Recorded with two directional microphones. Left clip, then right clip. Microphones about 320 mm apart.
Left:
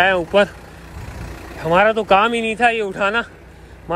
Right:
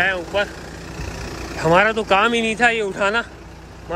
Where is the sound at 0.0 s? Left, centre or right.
Centre.